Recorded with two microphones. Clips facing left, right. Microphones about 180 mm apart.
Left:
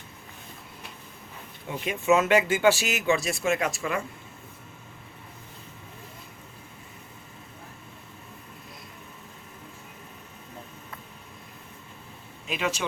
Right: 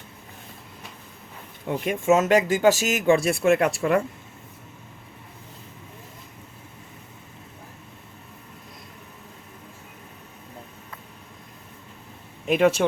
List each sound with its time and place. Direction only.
1.6 s speech: 50° right (ahead or behind)
12.5 s speech: 55° right (ahead or behind)